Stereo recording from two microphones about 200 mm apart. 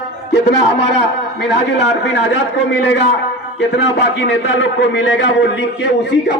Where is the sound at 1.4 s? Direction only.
60° left (ahead or behind).